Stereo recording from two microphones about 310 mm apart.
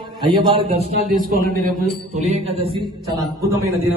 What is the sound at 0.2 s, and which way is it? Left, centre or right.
A man's voice, centre.